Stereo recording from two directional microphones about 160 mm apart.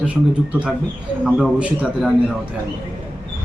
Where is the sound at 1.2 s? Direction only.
5° right (ahead or behind).